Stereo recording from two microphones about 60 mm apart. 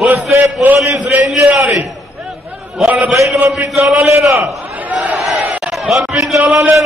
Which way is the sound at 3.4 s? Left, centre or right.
Right.